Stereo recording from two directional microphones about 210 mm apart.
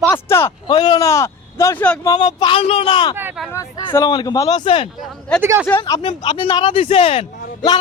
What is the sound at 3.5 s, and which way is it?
Speech, 20° left (ahead or behind).